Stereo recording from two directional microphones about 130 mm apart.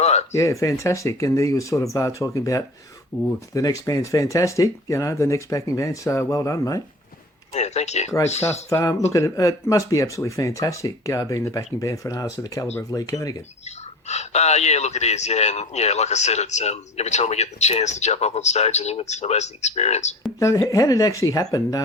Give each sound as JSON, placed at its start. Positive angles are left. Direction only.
{"t": 0.0, "sound": "a sound", "side_deg": 55}
{"t": 0.3, "sound": "speech", "side_deg": 25}
{"t": 3.1, "sound": "speech", "side_deg": -10}
{"t": 3.5, "sound": "speech", "side_deg": 25}
{"t": 7.5, "sound": "speech", "side_deg": 60}
{"t": 8.7, "sound": "speech", "side_deg": 25}
{"t": 13.7, "sound": "speech", "side_deg": 55}
{"t": 20.4, "sound": "speech", "side_deg": 25}